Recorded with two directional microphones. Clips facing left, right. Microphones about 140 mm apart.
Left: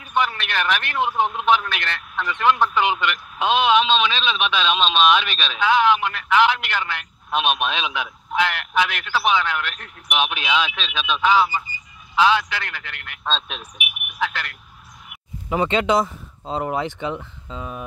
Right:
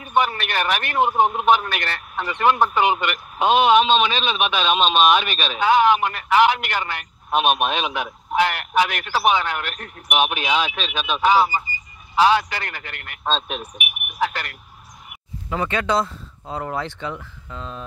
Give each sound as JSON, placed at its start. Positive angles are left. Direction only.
{"t": 0.0, "sound": "speech", "side_deg": -45}
{"t": 15.5, "sound": "speech", "side_deg": 20}